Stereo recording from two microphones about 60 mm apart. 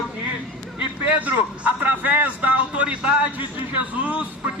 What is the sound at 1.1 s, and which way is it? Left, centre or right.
A man's voice, right.